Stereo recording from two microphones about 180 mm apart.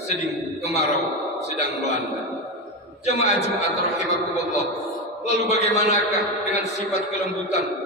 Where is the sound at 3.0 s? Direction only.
40° left (ahead or behind).